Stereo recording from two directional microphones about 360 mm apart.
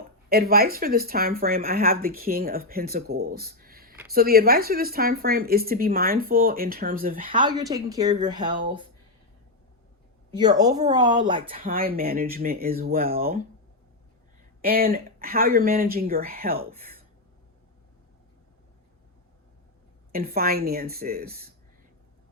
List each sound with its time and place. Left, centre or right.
0.3 s speech: right
10.3 s speech: centre
14.6 s speech: right
20.1 s speech: right